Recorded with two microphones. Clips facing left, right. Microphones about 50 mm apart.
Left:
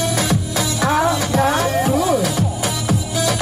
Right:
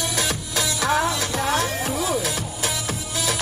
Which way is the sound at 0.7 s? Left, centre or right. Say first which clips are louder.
Left 4 dB; centre.